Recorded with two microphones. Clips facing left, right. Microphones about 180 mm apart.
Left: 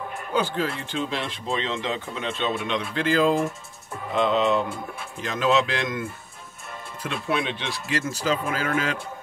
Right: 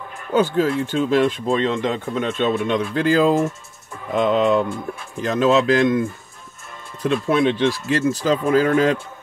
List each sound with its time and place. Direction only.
0.3 s speech: 50° right (ahead or behind)